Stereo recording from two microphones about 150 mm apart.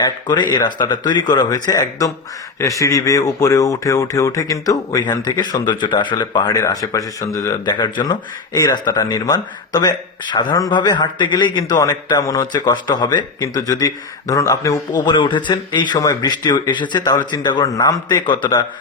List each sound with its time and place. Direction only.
0.0 s speech: 30° left (ahead or behind)